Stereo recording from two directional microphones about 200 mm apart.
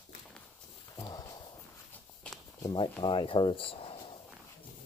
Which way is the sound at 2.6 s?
25° left (ahead or behind).